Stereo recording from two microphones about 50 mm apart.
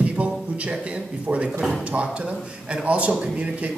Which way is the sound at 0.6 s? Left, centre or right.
Right.